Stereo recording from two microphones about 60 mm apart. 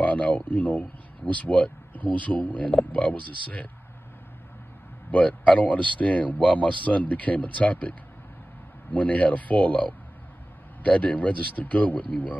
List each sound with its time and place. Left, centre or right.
0.0 s speech: left
5.1 s speech: left
8.9 s speech: left